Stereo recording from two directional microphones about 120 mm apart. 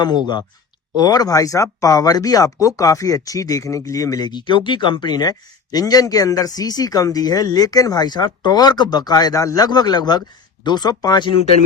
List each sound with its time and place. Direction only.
0.0 s speech: 35° left (ahead or behind)